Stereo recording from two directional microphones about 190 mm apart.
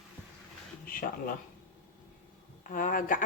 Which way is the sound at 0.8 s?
45° left (ahead or behind).